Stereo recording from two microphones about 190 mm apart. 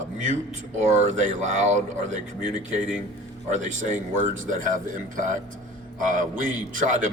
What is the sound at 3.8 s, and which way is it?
A man's voice, 40° right (ahead or behind).